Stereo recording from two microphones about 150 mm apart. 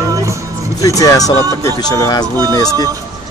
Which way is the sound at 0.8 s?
20° left (ahead or behind).